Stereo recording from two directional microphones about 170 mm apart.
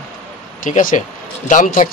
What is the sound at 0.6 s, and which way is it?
A man's voice, 50° left (ahead or behind).